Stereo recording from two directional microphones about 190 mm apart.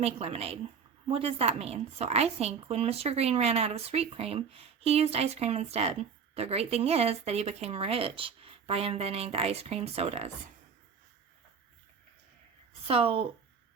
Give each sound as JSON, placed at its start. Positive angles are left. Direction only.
{"t": 0.0, "sound": "a woman's voice", "side_deg": -30}
{"t": 12.9, "sound": "a woman's voice", "side_deg": -30}